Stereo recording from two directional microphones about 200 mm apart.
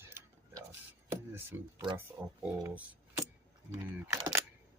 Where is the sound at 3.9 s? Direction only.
10° right (ahead or behind).